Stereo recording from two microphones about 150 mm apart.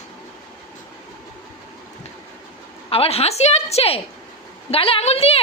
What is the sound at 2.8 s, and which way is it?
A woman's voice, 40° left (ahead or behind).